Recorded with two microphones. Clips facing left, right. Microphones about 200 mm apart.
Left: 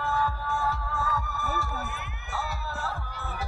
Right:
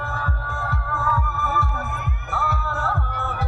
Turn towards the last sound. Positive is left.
turn(degrees=-60)  # may be behind; listen again after turning